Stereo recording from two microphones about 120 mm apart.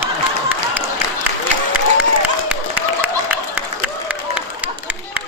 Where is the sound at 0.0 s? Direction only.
15° right (ahead or behind).